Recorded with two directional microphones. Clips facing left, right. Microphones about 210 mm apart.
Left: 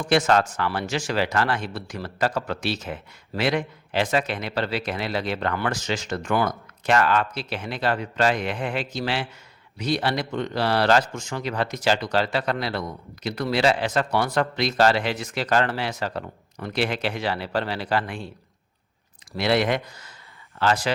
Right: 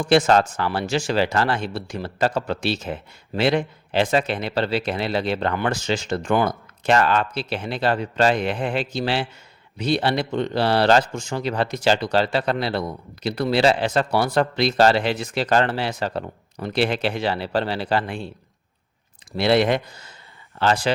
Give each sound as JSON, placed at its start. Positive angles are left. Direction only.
{"t": 0.0, "sound": "a man's voice", "side_deg": -30}
{"t": 19.4, "sound": "a man's voice", "side_deg": -30}